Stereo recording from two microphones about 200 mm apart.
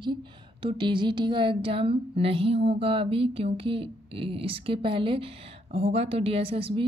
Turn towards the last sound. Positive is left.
turn(degrees=-25)  # may be behind; listen again after turning